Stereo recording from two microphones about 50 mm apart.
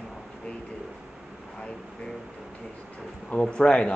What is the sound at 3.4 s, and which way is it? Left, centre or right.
Speech, centre.